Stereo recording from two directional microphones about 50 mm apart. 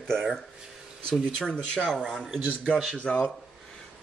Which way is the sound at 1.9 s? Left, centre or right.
Centre.